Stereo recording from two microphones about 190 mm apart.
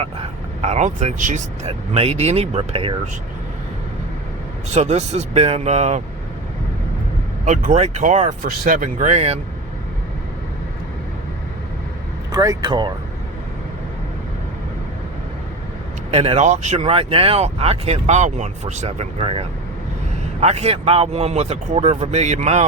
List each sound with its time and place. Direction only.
0.0 s speech: 35° right (ahead or behind)
4.7 s speech: 35° right (ahead or behind)
7.4 s speech: 40° right (ahead or behind)
12.3 s speech: 20° right (ahead or behind)
16.1 s speech: 30° right (ahead or behind)